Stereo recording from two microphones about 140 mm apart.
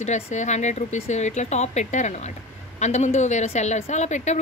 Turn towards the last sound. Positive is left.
turn(degrees=55)  # may be behind; listen again after turning